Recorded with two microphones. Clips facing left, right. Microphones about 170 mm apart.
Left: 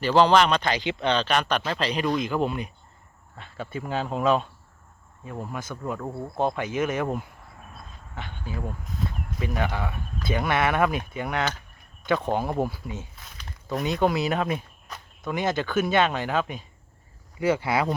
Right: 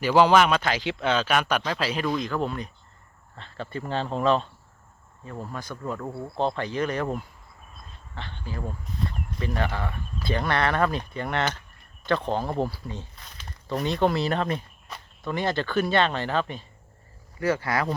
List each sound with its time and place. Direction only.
0.0 s speech: 10° right (ahead or behind)
2.3 s speech: 10° left (ahead or behind)
6.3 s speech: 15° left (ahead or behind)
8.5 s speech: 5° left (ahead or behind)
15.4 s speech: 15° left (ahead or behind)
17.5 s speech: 20° left (ahead or behind)